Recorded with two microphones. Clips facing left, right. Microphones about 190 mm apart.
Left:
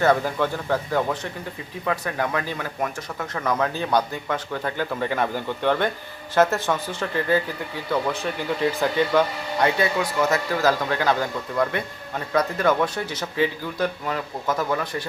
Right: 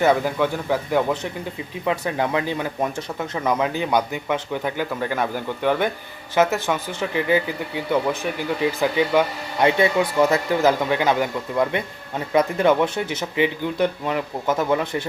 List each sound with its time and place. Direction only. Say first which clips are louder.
0.0 s speech: right 2 dB; 10° right (ahead or behind)